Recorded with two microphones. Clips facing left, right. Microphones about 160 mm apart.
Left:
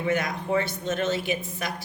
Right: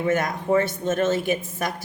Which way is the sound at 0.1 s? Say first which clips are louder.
Right 4 dB; 45° right (ahead or behind).